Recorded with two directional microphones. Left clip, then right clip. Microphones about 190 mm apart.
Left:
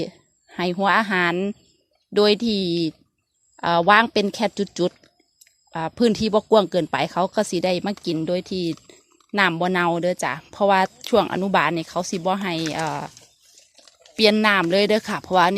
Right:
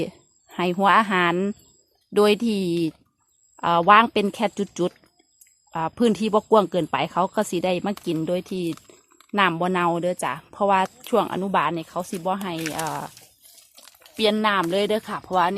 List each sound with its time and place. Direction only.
0.0 s speech: centre (ahead or behind); by 13.1 s 15° left (ahead or behind)
14.2 s speech: 20° left (ahead or behind)